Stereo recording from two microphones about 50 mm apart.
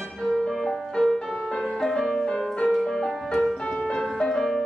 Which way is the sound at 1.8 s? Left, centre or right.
Centre.